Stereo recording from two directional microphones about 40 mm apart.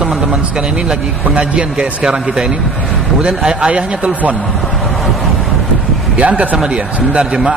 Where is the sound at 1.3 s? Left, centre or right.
Right.